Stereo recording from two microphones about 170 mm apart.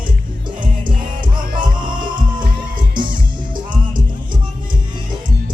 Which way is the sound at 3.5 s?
25° right (ahead or behind).